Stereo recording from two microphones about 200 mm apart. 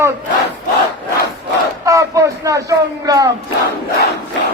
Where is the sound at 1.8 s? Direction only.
15° right (ahead or behind).